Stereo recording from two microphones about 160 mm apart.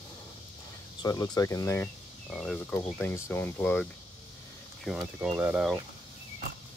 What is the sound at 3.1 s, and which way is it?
Speech, 15° left (ahead or behind).